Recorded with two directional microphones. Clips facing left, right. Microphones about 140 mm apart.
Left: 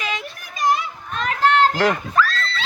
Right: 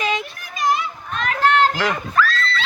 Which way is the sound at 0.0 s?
20° right (ahead or behind).